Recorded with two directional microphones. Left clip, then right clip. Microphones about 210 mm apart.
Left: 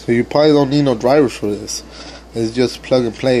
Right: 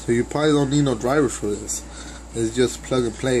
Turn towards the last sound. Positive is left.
turn(degrees=25)  # may be behind; listen again after turning